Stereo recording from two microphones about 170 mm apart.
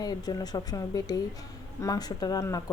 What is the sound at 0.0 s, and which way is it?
A woman's voice, 20° left (ahead or behind).